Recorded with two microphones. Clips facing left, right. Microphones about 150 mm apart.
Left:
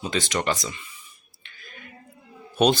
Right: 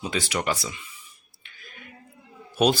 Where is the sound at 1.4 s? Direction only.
5° right (ahead or behind).